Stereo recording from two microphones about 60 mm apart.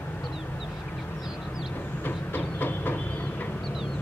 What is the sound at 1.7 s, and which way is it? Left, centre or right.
Train, left.